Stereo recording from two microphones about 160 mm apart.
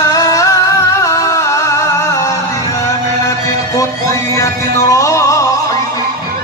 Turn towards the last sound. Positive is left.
turn(degrees=20)  # may be behind; listen again after turning